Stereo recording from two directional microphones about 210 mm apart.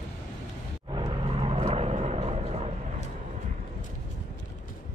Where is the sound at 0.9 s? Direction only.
25° right (ahead or behind).